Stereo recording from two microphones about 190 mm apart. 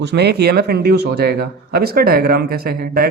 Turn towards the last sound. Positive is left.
turn(degrees=-50)  # may be behind; listen again after turning